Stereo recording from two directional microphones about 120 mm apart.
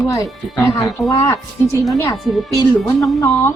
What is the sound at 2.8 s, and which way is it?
Speech, centre (ahead or behind).